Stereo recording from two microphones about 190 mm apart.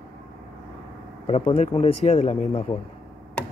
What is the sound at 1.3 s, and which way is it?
Speech, 30° left (ahead or behind).